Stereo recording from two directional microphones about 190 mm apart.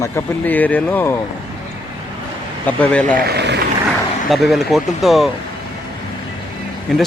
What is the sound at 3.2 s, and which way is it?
Speech, 60° right (ahead or behind).